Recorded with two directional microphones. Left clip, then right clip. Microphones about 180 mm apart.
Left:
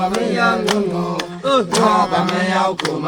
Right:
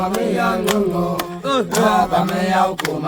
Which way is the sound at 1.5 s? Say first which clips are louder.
Left 1 dB; 20° right (ahead or behind).